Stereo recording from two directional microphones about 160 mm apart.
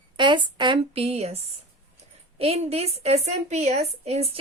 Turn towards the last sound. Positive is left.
turn(degrees=-40)  # may be behind; listen again after turning